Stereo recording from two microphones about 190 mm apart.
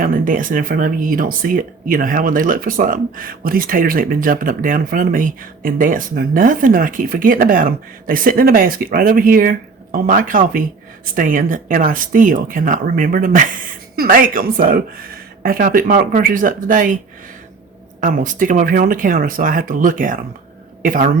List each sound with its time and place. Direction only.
0.0 s speech: 45° right (ahead or behind)
18.0 s speech: 45° right (ahead or behind)